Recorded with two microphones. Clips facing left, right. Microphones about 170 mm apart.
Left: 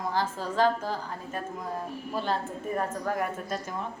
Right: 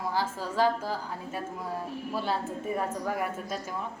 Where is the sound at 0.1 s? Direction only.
10° right (ahead or behind).